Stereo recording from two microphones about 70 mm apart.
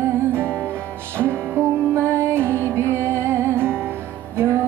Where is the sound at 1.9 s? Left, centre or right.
Right.